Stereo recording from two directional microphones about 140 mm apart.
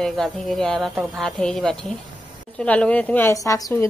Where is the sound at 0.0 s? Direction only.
Centre (ahead or behind).